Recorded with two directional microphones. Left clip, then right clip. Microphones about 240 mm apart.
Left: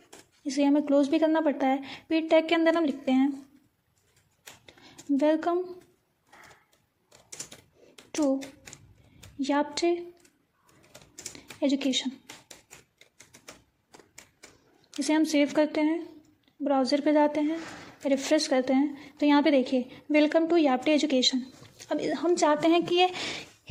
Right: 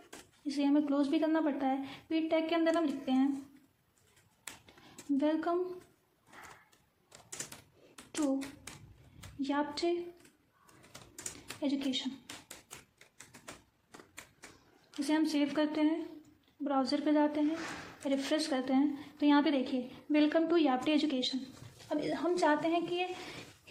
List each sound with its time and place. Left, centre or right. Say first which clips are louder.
0.4 s a woman's voice: left 6 dB; left
5.1 s a woman's voice: left 7 dB; left
8.1 s a child's voice: left 7 dB; left
9.4 s a woman's voice: left 7 dB; left
11.6 s a woman's voice: left 8 dB; left
14.8 s a woman's voice: left 6 dB; left